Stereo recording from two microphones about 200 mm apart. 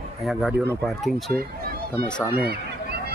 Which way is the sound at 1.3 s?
50° right (ahead or behind).